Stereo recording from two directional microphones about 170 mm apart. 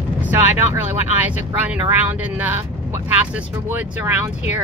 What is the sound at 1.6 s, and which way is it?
Speech, 10° right (ahead or behind).